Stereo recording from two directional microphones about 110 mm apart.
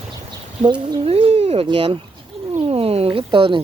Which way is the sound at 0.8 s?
40° right (ahead or behind).